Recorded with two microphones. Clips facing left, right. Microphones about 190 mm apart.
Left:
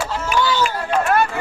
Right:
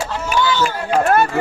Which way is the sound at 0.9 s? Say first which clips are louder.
Right 3 dB; 45° right (ahead or behind).